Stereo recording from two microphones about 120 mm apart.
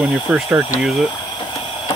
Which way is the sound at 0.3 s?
15° right (ahead or behind).